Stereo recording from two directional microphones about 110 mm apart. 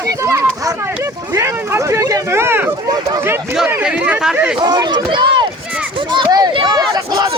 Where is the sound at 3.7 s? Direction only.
10° right (ahead or behind).